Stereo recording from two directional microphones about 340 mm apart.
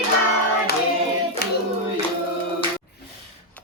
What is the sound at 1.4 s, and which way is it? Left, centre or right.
Hands, left.